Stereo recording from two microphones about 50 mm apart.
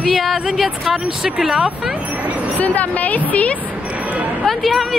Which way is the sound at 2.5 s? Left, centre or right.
Left.